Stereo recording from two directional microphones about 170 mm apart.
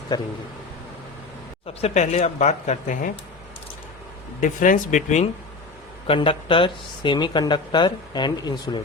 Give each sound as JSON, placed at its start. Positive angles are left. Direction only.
{"t": 0.1, "sound": "speech", "side_deg": 20}
{"t": 1.6, "sound": "speech", "side_deg": 40}
{"t": 4.4, "sound": "speech", "side_deg": 50}
{"t": 6.1, "sound": "speech", "side_deg": 30}